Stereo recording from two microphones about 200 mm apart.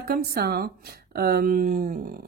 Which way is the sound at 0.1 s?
50° right (ahead or behind).